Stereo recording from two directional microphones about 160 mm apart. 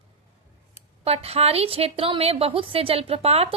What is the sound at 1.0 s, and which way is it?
A woman's voice, 40° right (ahead or behind).